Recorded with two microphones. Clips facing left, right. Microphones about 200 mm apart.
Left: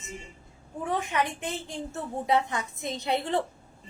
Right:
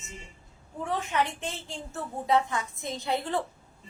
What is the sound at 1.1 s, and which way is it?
A woman's voice, 15° left (ahead or behind).